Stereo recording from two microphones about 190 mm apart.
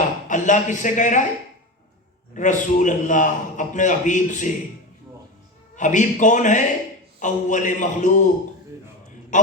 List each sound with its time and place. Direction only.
0.3 s speech: 40° left (ahead or behind)
2.3 s a man's voice: 40° left (ahead or behind)
5.7 s a man's voice: 40° left (ahead or behind)
9.3 s a sound: 40° left (ahead or behind)